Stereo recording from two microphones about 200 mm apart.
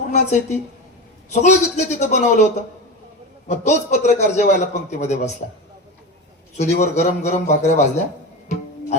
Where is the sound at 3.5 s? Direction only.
35° left (ahead or behind).